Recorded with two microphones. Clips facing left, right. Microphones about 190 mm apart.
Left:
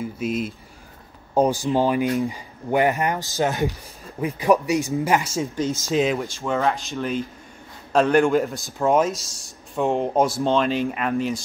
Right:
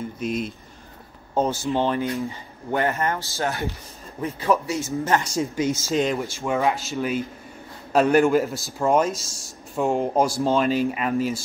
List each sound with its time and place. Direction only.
0.0 s speech: 5° left (ahead or behind)
5.9 s speech: centre (ahead or behind)
6.3 s speech: 10° right (ahead or behind)